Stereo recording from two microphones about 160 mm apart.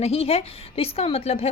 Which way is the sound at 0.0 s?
40° left (ahead or behind).